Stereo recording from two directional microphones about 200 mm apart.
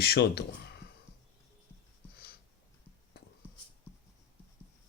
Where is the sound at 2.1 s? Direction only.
50° left (ahead or behind).